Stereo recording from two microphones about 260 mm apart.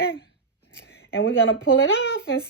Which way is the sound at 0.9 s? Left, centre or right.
Left.